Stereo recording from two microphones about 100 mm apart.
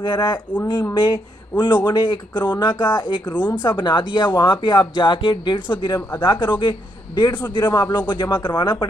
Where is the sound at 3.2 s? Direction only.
15° left (ahead or behind).